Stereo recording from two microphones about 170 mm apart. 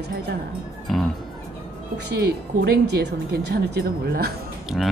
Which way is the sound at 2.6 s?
80° right.